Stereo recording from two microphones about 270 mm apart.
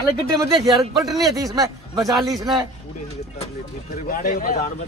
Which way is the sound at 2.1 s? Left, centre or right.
Centre.